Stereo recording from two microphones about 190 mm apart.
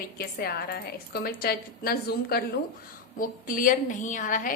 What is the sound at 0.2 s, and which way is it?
A woman's voice, 55° left (ahead or behind).